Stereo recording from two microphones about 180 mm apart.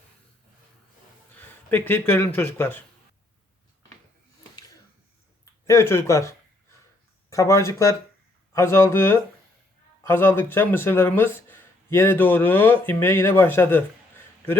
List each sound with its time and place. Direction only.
1.4 s speech: 10° left (ahead or behind)
5.6 s speech: 15° left (ahead or behind)